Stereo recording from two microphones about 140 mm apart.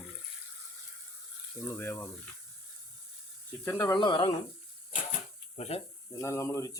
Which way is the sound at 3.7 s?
15° left (ahead or behind).